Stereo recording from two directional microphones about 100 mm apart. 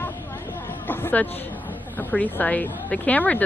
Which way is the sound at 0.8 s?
20° left (ahead or behind).